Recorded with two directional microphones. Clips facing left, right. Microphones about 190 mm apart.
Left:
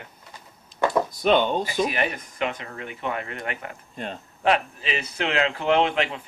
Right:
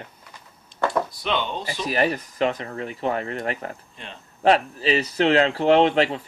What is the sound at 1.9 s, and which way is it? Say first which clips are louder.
Speech: right 5 dB; 35° right (ahead or behind).